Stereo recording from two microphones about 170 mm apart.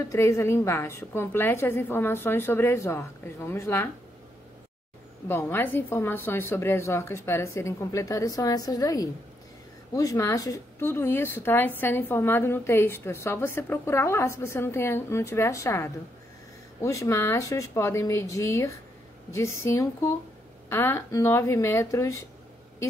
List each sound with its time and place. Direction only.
0.0 s a woman's voice: 15° left (ahead or behind)
5.3 s a woman's voice: 15° left (ahead or behind)